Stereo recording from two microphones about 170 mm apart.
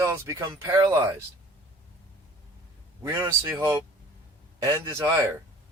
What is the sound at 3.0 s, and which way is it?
Speech, 15° right (ahead or behind).